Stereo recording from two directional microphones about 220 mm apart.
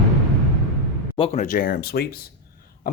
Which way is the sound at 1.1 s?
25° left (ahead or behind).